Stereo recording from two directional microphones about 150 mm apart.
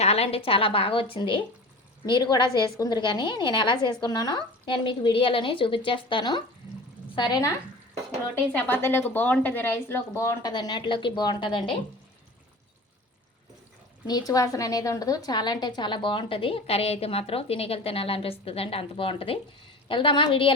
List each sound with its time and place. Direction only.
0.0 s a woman's voice: 45° left (ahead or behind); by 7.6 s 25° left (ahead or behind)
8.5 s a woman's voice: 15° left (ahead or behind); by 11.6 s 30° left (ahead or behind)
14.1 s a woman's voice: 25° left (ahead or behind)